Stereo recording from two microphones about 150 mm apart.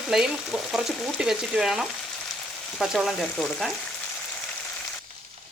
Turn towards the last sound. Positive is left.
turn(degrees=0)  # may be behind; listen again after turning